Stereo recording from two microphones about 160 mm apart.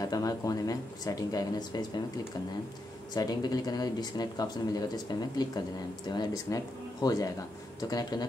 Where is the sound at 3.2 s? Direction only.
25° left (ahead or behind).